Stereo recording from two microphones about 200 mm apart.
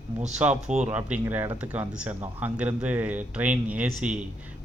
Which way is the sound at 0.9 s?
10° right (ahead or behind).